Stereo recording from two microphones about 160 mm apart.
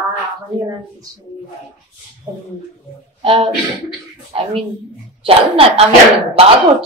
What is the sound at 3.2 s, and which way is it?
A woman's voice, 35° right (ahead or behind).